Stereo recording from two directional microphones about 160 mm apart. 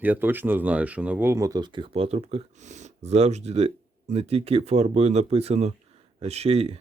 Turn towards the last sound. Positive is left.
turn(degrees=-40)  # may be behind; listen again after turning